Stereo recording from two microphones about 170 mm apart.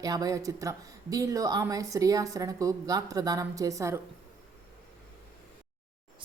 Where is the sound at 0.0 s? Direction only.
20° right (ahead or behind).